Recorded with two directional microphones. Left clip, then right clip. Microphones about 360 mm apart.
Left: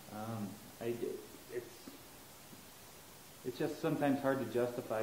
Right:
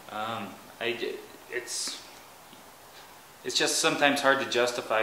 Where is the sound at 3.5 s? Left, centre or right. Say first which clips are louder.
Right 12 dB; centre.